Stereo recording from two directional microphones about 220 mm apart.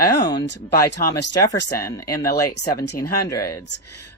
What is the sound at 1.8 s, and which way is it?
Speech, 15° left (ahead or behind).